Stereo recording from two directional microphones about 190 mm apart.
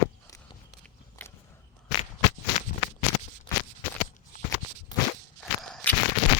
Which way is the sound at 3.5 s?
25° left (ahead or behind).